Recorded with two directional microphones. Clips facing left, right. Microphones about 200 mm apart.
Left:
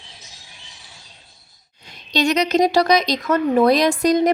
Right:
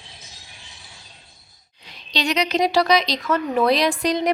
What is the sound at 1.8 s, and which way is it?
Speech, 45° left (ahead or behind).